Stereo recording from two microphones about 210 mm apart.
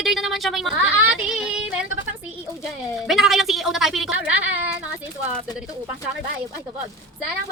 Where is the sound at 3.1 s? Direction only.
Centre (ahead or behind).